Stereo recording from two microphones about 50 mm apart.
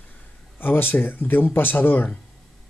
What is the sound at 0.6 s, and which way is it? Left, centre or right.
Speech, left.